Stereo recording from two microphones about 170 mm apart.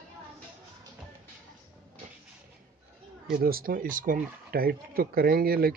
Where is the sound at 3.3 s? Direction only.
60° right (ahead or behind).